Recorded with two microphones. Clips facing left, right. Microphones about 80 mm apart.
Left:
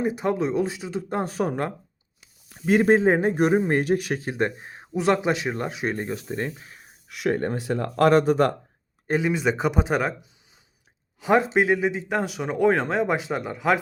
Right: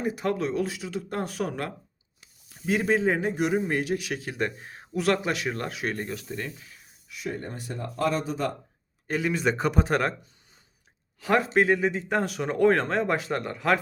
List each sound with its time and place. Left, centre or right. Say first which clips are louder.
0.0 s speech: left 3 dB; left
2.5 s a man's voice: left 6 dB; left
7.1 s speech: left 10 dB; left
9.1 s speech: left 3 dB; centre
11.2 s speech: left 3 dB; centre